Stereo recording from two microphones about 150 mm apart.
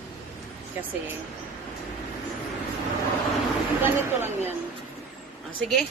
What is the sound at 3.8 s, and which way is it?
Speech, 15° right (ahead or behind).